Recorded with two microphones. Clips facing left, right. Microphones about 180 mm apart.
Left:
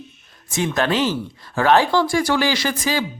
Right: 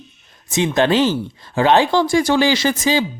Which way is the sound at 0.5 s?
20° right (ahead or behind).